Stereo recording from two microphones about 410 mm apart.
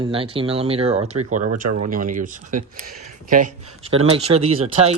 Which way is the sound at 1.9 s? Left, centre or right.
Centre.